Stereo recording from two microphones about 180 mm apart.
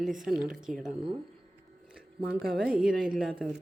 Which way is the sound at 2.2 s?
55° right (ahead or behind).